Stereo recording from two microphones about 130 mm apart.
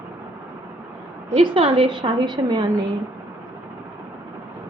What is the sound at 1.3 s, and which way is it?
A woman's voice, 45° right (ahead or behind).